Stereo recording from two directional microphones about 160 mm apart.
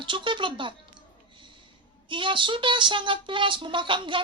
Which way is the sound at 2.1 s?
30° right (ahead or behind).